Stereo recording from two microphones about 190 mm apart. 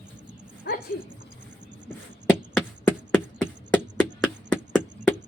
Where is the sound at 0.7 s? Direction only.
55° left (ahead or behind).